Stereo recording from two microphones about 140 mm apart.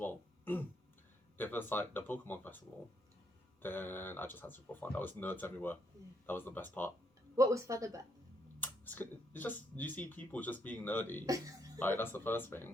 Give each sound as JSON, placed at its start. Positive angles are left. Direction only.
{"t": 0.0, "sound": "a sound", "side_deg": 15}
{"t": 1.4, "sound": "speech", "side_deg": 15}
{"t": 3.6, "sound": "speech", "side_deg": 15}
{"t": 7.3, "sound": "speech", "side_deg": -20}
{"t": 8.6, "sound": "speech", "side_deg": 15}
{"t": 11.3, "sound": "speech", "side_deg": -25}
{"t": 11.8, "sound": "speech", "side_deg": 15}